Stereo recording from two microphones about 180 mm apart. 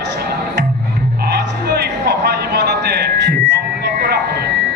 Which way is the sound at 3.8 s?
60° right (ahead or behind).